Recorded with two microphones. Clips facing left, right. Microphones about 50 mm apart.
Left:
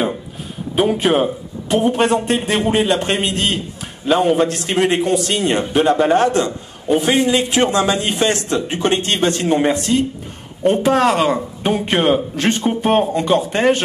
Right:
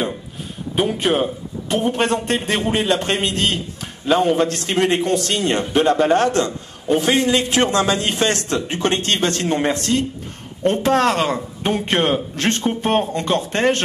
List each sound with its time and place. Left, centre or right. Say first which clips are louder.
0.7 s a man's voice: left 3 dB; centre